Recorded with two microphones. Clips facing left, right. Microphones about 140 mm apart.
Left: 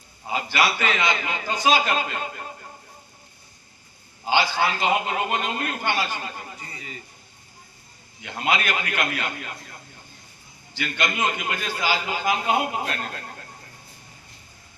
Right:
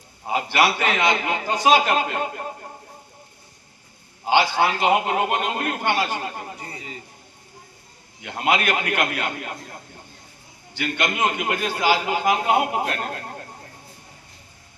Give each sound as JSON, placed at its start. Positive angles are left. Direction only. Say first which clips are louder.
{"t": 0.3, "sound": "a man's voice", "louder": "right 3 dB", "side_deg": -60}
{"t": 4.3, "sound": "a man's voice", "louder": "right 3 dB", "side_deg": -60}
{"t": 6.6, "sound": "speech", "louder": "right 3 dB", "side_deg": -35}
{"t": 8.2, "sound": "a man's voice", "louder": "right 3 dB", "side_deg": -60}
{"t": 10.8, "sound": "a man's voice", "louder": "right 2 dB", "side_deg": -60}